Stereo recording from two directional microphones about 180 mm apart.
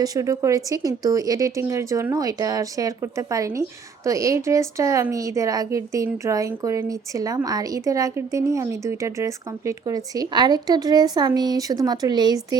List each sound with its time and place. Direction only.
0.0 s speech: 20° right (ahead or behind)